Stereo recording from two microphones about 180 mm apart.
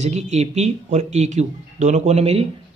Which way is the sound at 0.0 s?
40° right (ahead or behind).